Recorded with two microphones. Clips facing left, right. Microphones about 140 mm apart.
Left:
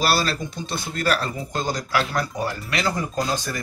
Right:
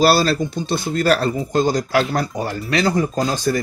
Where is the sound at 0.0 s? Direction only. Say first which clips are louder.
Right 7 dB; 30° right (ahead or behind).